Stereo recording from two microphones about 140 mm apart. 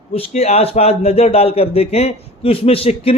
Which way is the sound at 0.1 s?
45° left (ahead or behind).